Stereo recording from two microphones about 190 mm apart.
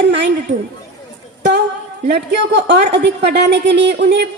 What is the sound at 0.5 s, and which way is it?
Speech, 70° right (ahead or behind).